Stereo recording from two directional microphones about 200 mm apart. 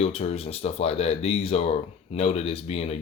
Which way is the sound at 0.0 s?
30° left (ahead or behind).